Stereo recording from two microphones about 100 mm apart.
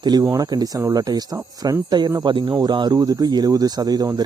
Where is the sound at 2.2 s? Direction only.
50° right (ahead or behind).